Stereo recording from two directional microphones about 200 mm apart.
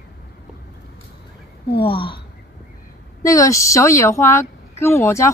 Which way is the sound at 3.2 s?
15° left (ahead or behind).